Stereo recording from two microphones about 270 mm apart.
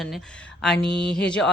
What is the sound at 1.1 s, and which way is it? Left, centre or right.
Speech, centre.